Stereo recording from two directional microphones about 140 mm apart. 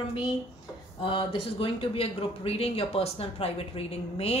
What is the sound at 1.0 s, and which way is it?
A woman's voice, 35° left (ahead or behind).